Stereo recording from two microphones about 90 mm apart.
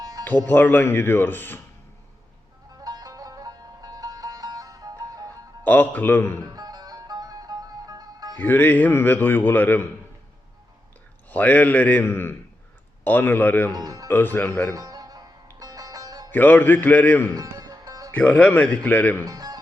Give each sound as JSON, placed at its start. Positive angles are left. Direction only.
{"t": 0.0, "sound": "music", "side_deg": -45}
{"t": 0.4, "sound": "speech", "side_deg": 20}
{"t": 2.8, "sound": "music", "side_deg": -45}
{"t": 5.6, "sound": "speech", "side_deg": 20}
{"t": 6.5, "sound": "music", "side_deg": -45}
{"t": 8.4, "sound": "speech", "side_deg": 20}
{"t": 11.3, "sound": "speech", "side_deg": 15}
{"t": 13.7, "sound": "speech", "side_deg": -45}
{"t": 14.1, "sound": "speech", "side_deg": 20}
{"t": 14.7, "sound": "music", "side_deg": -40}
{"t": 16.3, "sound": "speech", "side_deg": 20}
{"t": 17.3, "sound": "music", "side_deg": -40}
{"t": 18.1, "sound": "speech", "side_deg": 15}
{"t": 19.2, "sound": "speech", "side_deg": -45}